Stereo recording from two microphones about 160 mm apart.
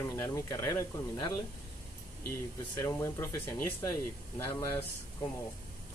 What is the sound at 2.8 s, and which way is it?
Speech, 15° left (ahead or behind).